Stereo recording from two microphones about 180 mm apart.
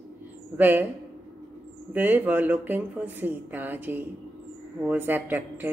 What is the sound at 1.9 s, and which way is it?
A woman's voice, 10° right (ahead or behind).